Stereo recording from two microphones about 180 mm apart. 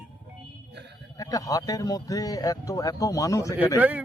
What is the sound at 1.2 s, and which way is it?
A man's voice, 20° left (ahead or behind).